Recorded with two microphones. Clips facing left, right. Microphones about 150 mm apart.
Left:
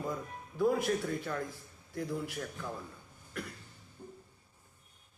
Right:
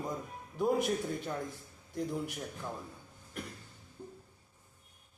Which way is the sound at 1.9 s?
20° right (ahead or behind).